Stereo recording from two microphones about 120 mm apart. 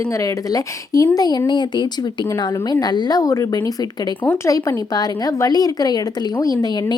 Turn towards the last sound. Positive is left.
turn(degrees=30)  # may be behind; listen again after turning